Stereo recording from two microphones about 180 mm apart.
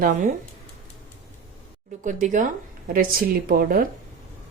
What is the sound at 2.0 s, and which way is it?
A woman's voice, 45° right (ahead or behind).